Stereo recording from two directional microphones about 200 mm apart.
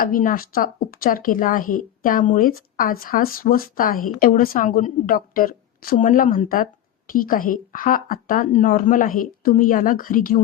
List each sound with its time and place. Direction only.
0.0 s speech: 45° left (ahead or behind)